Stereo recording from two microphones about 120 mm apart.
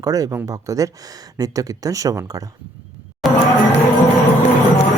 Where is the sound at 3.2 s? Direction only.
Centre (ahead or behind).